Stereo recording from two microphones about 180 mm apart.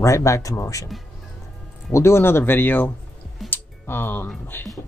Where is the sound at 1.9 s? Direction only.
15° left (ahead or behind).